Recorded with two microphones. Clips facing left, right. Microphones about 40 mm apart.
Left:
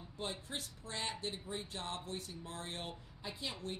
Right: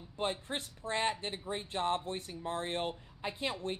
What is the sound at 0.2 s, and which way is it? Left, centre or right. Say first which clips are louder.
A man's voice: right 7 dB; right.